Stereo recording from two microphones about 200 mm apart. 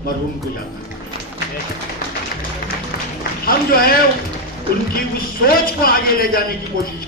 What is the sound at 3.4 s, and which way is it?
Speech, 45° left (ahead or behind).